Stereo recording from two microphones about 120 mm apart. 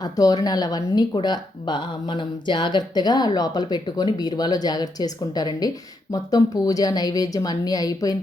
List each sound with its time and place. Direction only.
0.0 s speech: 30° left (ahead or behind)